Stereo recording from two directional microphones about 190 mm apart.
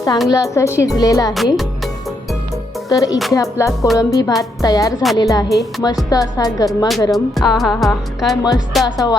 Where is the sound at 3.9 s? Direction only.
20° left (ahead or behind).